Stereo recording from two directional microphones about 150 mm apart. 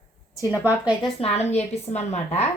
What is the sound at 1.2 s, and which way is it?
Speech, 45° left (ahead or behind).